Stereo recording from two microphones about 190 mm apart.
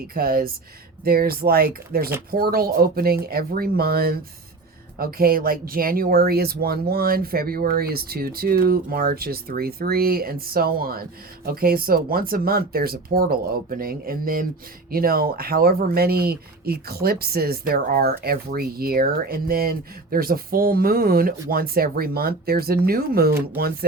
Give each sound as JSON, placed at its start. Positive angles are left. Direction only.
{"t": 0.1, "sound": "speech", "side_deg": -50}